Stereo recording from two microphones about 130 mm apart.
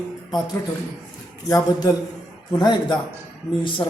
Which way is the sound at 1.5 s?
25° left (ahead or behind).